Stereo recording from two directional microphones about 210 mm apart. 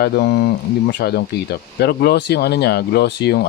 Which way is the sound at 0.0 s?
50° left (ahead or behind).